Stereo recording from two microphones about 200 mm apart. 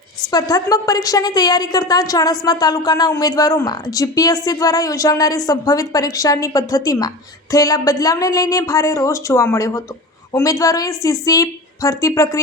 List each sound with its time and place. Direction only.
0.3 s a woman's voice: 20° left (ahead or behind)